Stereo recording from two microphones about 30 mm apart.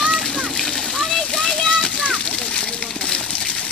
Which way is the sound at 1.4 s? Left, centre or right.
Left.